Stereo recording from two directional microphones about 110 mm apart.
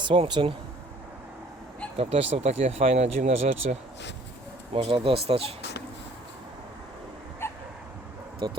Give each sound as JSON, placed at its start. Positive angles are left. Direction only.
{"t": 0.0, "sound": "speech", "side_deg": -50}
{"t": 2.0, "sound": "speech", "side_deg": -65}
{"t": 4.7, "sound": "speech", "side_deg": -60}
{"t": 7.4, "sound": "dog", "side_deg": 20}
{"t": 8.4, "sound": "speech", "side_deg": -45}